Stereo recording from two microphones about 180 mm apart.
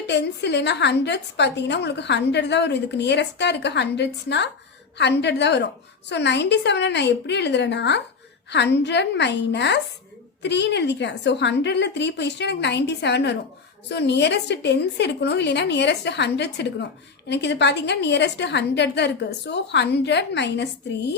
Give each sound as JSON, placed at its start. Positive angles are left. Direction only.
{"t": 0.1, "sound": "a woman's voice", "side_deg": 70}